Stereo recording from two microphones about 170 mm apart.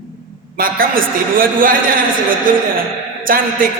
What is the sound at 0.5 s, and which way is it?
A man's voice, 55° right (ahead or behind).